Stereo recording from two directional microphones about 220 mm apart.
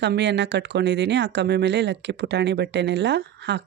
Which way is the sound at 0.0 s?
55° right (ahead or behind).